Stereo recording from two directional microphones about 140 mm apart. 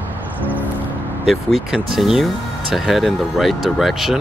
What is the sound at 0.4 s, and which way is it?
Music, 10° right (ahead or behind).